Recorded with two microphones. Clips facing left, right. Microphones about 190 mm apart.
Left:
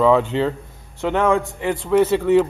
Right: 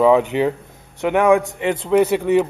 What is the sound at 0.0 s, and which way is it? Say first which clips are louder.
A man's voice: right 2 dB; 15° right (ahead or behind).